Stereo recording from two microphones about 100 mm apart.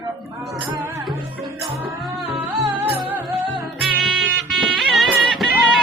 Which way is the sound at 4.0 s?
Centre (ahead or behind).